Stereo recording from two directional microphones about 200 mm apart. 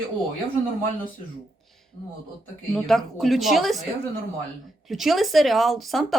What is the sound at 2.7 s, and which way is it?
Speech, centre (ahead or behind).